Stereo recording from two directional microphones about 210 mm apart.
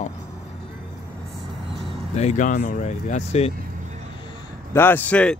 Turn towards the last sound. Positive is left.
turn(degrees=5)  # may be behind; listen again after turning